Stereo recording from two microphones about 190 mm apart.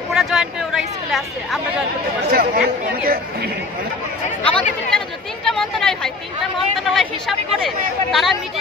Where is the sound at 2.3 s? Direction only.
50° right (ahead or behind).